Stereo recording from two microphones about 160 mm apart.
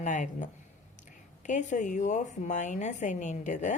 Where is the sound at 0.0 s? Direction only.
50° left (ahead or behind).